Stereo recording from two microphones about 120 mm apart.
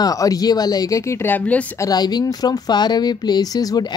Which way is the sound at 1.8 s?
35° left (ahead or behind).